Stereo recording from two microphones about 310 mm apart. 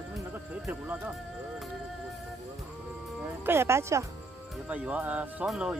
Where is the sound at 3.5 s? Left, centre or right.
Centre.